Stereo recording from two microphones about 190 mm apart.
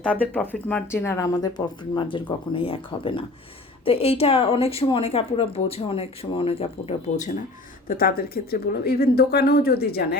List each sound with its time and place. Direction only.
0.0 s a woman's voice: 5° left (ahead or behind); by 7.3 s 30° left (ahead or behind)
7.9 s speech: 50° left (ahead or behind)